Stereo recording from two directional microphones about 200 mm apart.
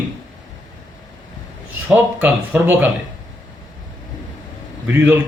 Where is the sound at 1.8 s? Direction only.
10° right (ahead or behind).